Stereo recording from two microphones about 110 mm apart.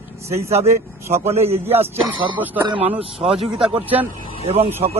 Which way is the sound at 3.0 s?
55° right (ahead or behind).